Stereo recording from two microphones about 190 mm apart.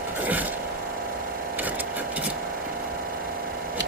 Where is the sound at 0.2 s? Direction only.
10° right (ahead or behind).